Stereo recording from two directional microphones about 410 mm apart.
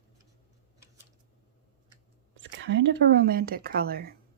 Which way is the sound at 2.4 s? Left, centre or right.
Right.